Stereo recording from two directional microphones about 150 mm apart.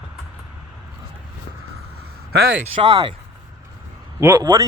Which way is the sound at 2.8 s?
35° right (ahead or behind).